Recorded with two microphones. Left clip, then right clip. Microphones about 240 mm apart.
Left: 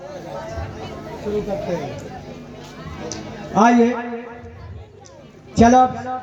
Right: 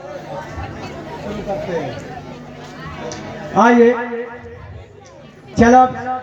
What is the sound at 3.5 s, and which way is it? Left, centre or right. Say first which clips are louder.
Speech: right 4 dB; left.